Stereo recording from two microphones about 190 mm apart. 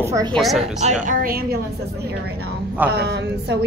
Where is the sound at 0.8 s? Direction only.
40° right (ahead or behind).